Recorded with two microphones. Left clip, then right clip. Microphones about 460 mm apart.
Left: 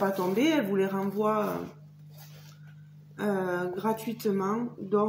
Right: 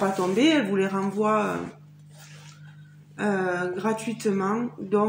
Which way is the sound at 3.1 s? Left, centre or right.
Left.